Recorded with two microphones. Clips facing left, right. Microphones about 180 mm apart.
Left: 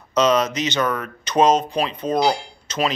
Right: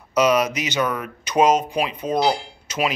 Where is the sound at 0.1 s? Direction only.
10° right (ahead or behind).